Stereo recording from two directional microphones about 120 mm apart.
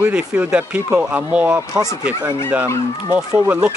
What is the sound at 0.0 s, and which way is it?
Speech, 10° right (ahead or behind).